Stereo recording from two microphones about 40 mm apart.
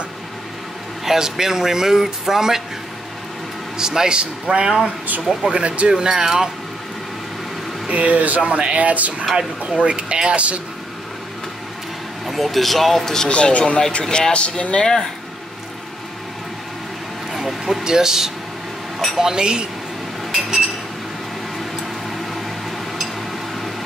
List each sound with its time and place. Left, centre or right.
1.0 s speech: centre
3.7 s speech: centre
5.2 s speech: centre
5.5 s speech: right
7.9 s speech: right
9.2 s speech: centre
9.8 s speech: right
12.3 s speech: centre
13.3 s speech: left
14.0 s speech: centre
17.3 s a sound: centre
17.8 s speech: centre
20.2 s chink: centre